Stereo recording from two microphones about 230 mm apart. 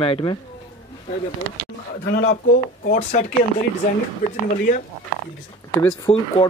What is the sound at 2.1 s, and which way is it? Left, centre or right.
Speech, left.